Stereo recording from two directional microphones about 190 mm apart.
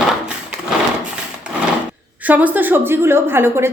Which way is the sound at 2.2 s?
10° right (ahead or behind).